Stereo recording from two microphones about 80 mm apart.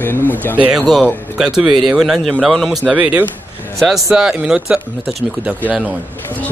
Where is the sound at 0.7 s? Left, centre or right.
Centre.